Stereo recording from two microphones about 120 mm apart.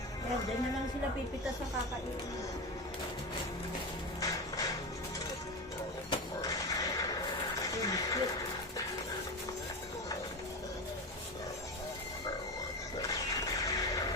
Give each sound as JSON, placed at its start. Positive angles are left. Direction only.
{"t": 4.2, "sound": "music", "side_deg": 30}
{"t": 6.1, "sound": "neigh", "side_deg": 30}
{"t": 7.6, "sound": "a sound", "side_deg": 30}
{"t": 13.0, "sound": "music", "side_deg": 30}